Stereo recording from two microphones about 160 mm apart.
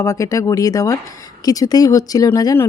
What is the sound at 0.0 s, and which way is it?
Speech, 20° left (ahead or behind).